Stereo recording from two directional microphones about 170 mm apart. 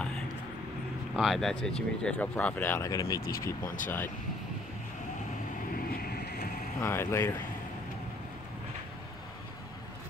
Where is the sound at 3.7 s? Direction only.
50° left (ahead or behind).